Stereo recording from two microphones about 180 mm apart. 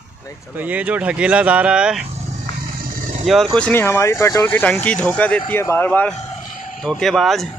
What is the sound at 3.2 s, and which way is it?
Speech, centre (ahead or behind).